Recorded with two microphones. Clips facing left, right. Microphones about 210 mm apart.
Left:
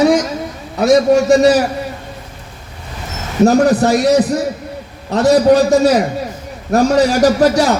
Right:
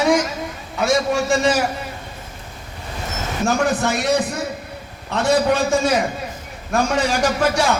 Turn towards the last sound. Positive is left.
turn(degrees=40)  # may be behind; listen again after turning